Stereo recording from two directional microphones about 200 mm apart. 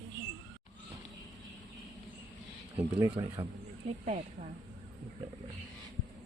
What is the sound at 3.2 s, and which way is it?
Speech, 20° right (ahead or behind).